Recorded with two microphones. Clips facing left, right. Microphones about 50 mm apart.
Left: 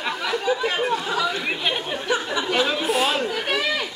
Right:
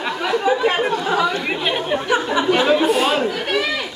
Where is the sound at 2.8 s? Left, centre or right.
Centre.